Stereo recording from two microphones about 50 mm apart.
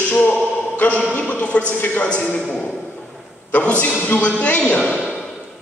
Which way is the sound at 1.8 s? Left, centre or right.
Left.